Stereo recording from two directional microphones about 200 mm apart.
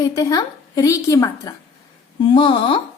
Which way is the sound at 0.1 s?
20° left (ahead or behind).